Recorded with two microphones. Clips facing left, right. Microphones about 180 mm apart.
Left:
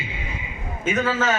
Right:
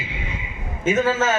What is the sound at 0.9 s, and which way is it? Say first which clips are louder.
Speech: right 3 dB; 25° right (ahead or behind).